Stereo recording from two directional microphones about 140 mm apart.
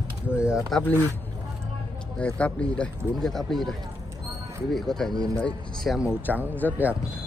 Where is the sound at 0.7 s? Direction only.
10° left (ahead or behind).